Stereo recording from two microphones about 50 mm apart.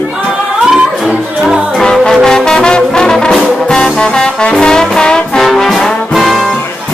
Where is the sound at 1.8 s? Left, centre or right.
Centre.